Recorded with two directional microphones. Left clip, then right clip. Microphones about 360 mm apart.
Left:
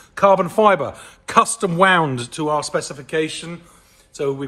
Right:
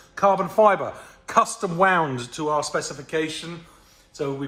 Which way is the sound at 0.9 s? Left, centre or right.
Right.